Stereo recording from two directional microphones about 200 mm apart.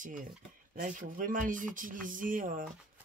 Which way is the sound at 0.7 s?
40° right (ahead or behind).